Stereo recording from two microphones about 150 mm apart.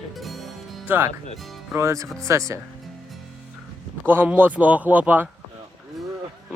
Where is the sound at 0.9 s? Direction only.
15° right (ahead or behind).